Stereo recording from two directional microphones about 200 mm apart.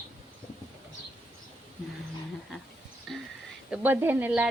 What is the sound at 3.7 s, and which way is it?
Speech, 10° right (ahead or behind).